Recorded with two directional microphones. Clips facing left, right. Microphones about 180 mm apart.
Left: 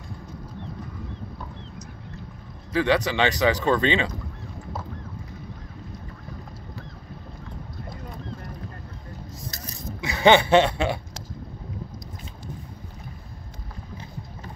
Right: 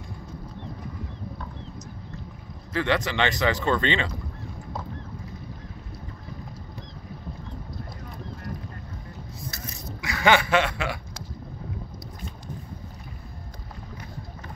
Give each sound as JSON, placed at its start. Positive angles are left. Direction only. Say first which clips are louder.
{"t": 2.7, "sound": "speech", "louder": "left 3 dB", "side_deg": 15}
{"t": 10.0, "sound": "chuckle", "louder": "left 4 dB", "side_deg": 25}